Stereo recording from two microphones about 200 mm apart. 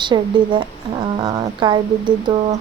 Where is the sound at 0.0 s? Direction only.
25° right (ahead or behind).